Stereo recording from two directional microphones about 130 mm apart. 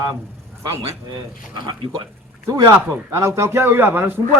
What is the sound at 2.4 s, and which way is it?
A man's voice, 30° right (ahead or behind).